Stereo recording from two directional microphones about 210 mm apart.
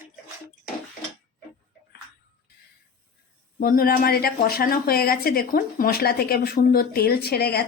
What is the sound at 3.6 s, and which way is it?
A woman's voice, 45° left (ahead or behind).